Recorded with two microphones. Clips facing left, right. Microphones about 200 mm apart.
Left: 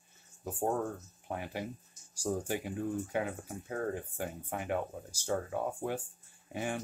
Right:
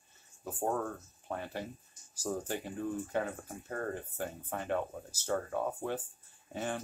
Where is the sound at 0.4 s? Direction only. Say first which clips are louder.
Left 1 dB; 15° left (ahead or behind).